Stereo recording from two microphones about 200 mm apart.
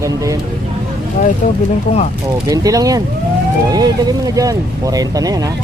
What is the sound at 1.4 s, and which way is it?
Speech, 35° left (ahead or behind).